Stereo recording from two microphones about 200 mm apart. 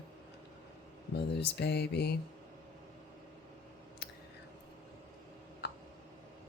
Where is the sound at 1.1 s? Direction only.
55° left (ahead or behind).